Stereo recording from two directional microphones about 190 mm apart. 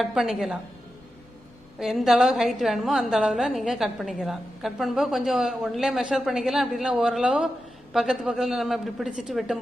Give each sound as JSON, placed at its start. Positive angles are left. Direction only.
{"t": 0.0, "sound": "a woman's voice", "side_deg": 0}
{"t": 1.8, "sound": "a woman's voice", "side_deg": 0}